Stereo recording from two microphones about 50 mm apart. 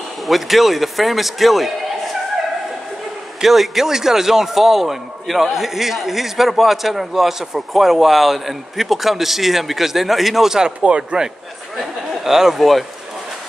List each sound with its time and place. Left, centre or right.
0.3 s a man's voice: centre
3.4 s a man's voice: centre
11.7 s speech: centre